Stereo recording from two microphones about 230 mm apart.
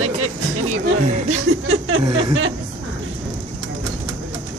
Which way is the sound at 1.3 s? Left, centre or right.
Right.